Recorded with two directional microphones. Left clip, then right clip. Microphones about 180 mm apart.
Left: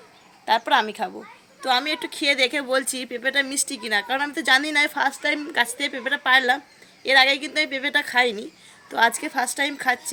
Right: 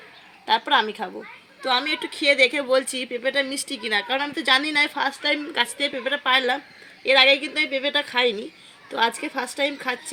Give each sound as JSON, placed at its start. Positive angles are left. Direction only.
{"t": 0.4, "sound": "a woman's voice", "side_deg": 20}